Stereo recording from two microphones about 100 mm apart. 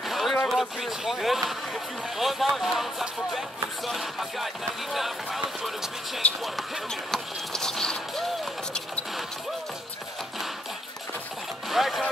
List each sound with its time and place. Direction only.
0.0 s a sound: centre (ahead or behind)
0.5 s speech: centre (ahead or behind)
11.7 s speech: centre (ahead or behind)